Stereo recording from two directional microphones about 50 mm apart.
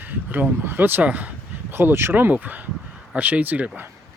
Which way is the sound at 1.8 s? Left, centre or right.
Right.